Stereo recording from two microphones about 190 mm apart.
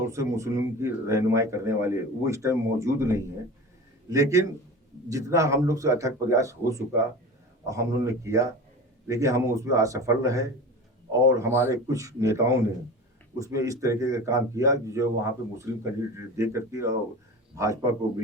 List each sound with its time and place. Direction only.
0.0 s a man's voice: 15° right (ahead or behind)